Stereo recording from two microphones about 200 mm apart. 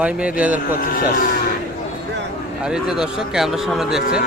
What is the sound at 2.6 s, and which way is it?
A man's voice, 5° right (ahead or behind).